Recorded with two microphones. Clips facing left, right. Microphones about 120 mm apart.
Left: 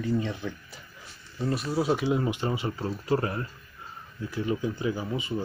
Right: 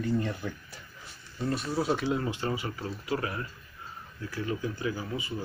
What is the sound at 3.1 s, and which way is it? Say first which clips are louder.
Speech: left 5 dB; 35° left (ahead or behind).